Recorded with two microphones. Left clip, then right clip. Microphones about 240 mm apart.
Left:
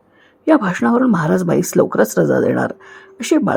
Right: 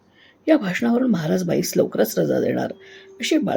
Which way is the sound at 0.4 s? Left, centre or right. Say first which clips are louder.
Left 5 dB; centre.